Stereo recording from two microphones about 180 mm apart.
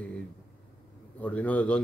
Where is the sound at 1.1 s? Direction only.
10° left (ahead or behind).